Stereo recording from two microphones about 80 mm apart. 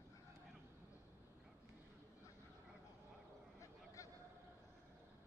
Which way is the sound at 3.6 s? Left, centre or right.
Left.